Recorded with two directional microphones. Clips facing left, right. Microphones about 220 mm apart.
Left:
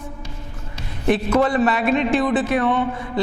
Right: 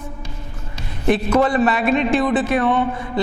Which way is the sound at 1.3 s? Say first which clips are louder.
Right 1 dB; 20° right (ahead or behind).